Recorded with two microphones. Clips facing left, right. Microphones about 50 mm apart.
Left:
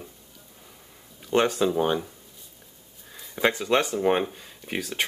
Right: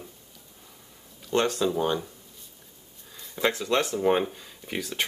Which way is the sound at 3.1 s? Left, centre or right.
Centre.